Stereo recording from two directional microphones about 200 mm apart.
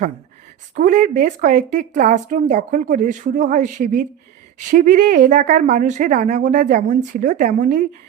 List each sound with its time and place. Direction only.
0.8 s a woman's voice: 40° right (ahead or behind)